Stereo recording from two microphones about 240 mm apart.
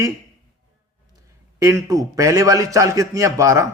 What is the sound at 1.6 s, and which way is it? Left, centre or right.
Speech, centre.